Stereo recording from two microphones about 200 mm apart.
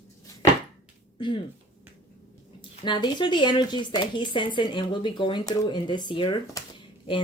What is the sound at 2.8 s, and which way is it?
Speech, 25° left (ahead or behind).